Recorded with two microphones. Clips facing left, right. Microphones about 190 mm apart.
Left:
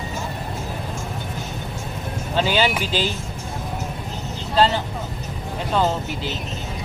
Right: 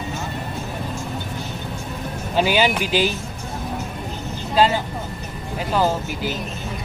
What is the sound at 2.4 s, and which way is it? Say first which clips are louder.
Speech: right 2 dB; 15° right (ahead or behind).